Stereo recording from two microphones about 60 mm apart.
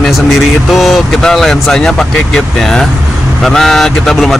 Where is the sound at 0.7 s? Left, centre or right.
Centre.